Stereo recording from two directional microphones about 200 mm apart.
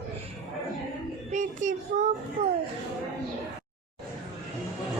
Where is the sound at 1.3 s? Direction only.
40° right (ahead or behind).